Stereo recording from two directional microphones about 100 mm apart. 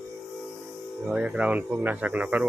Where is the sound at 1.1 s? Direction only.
10° right (ahead or behind).